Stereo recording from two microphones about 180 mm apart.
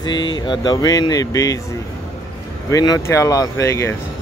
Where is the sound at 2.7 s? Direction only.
20° left (ahead or behind).